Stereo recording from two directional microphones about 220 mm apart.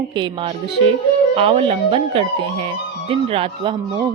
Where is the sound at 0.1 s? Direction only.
20° right (ahead or behind).